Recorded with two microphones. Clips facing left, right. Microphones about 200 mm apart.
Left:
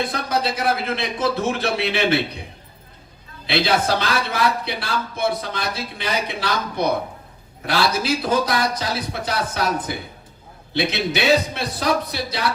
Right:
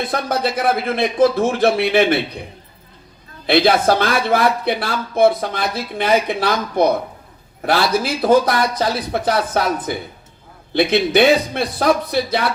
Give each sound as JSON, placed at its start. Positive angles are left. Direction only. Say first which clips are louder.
{"t": 0.1, "sound": "a man's voice", "louder": "right 3 dB", "side_deg": -55}
{"t": 3.4, "sound": "a man's voice", "louder": "right 6 dB", "side_deg": -55}
{"t": 10.8, "sound": "a man's voice", "louder": "right 8 dB", "side_deg": -55}